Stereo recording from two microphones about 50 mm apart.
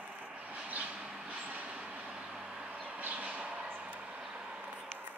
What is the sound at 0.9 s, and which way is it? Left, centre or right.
Vehicle, centre.